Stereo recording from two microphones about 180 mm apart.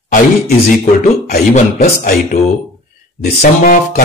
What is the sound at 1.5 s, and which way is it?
Speech, 40° left (ahead or behind).